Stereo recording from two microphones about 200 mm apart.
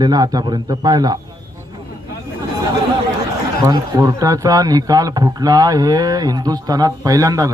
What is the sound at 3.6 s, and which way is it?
A man's voice, 20° right (ahead or behind).